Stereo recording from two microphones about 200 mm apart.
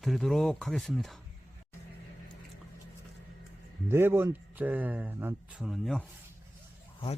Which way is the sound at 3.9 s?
10° right (ahead or behind).